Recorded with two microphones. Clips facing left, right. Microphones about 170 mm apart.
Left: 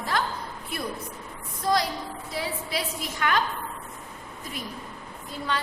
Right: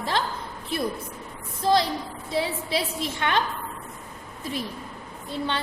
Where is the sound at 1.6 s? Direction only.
25° right (ahead or behind).